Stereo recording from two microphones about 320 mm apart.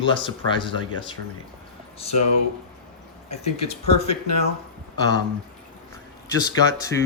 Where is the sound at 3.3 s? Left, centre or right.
Centre.